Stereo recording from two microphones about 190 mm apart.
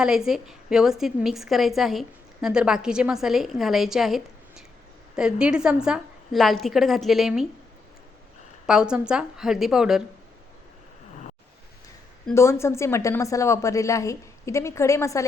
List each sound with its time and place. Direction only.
0.0 s a woman's voice: 5° right (ahead or behind)
8.6 s a woman's voice: 5° right (ahead or behind)
12.3 s a woman's voice: 15° left (ahead or behind)